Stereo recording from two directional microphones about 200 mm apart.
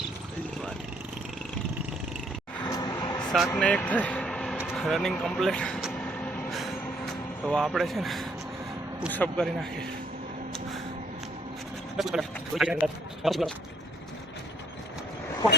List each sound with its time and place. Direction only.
2.6 s a sound: 15° left (ahead or behind)
3.2 s speech: centre (ahead or behind)
4.5 s vehicle: centre (ahead or behind)
9.1 s speech: 5° left (ahead or behind)
11.9 s speech: centre (ahead or behind)